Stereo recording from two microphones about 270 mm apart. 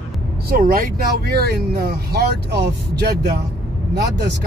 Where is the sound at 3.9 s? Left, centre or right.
Right.